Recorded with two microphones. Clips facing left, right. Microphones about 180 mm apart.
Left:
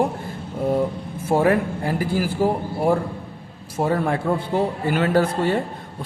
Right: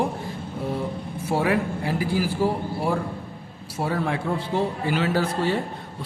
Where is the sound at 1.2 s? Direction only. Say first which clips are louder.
Left 5 dB; 50° left (ahead or behind).